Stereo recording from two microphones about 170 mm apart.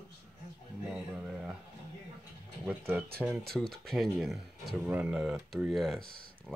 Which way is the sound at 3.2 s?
5° right (ahead or behind).